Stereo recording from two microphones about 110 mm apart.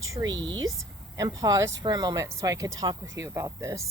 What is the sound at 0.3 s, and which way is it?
Speech, 45° right (ahead or behind).